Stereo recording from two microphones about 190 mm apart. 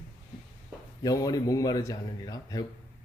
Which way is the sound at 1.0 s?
20° left (ahead or behind).